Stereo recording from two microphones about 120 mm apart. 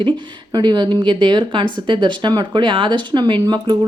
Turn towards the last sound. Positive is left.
turn(degrees=-40)  # may be behind; listen again after turning